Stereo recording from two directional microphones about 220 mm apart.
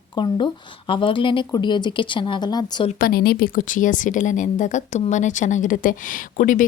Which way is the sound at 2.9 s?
40° left (ahead or behind).